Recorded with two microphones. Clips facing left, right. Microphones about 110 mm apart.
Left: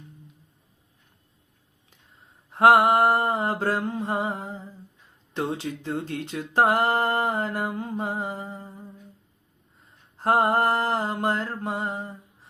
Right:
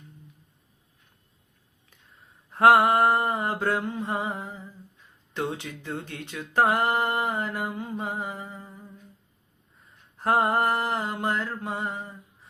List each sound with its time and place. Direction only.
2.5 s mantra: 25° left (ahead or behind)
3.8 s speech: 35° left (ahead or behind)
8.2 s music: 30° left (ahead or behind)
10.2 s speech: 25° left (ahead or behind)
11.6 s mantra: 30° left (ahead or behind)